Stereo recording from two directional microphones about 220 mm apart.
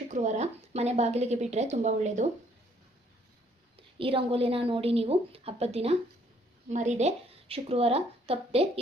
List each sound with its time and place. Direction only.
0.1 s a woman's voice: 35° right (ahead or behind)
3.8 s a woman's voice: 25° right (ahead or behind)